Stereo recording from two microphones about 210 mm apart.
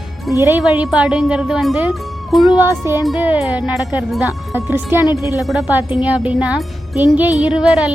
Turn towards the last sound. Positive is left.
turn(degrees=-5)  # may be behind; listen again after turning